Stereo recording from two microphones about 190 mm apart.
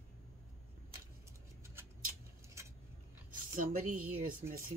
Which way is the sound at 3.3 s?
45° right (ahead or behind).